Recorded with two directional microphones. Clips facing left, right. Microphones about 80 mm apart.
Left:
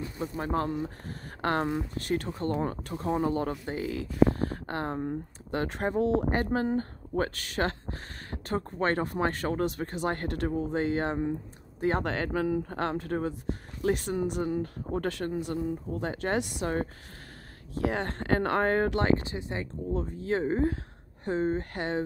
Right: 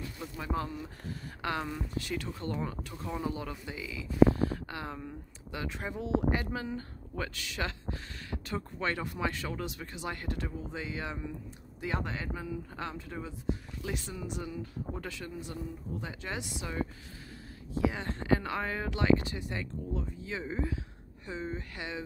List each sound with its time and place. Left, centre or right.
0.4 s speech: left
12.1 s speech: left
19.2 s speech: left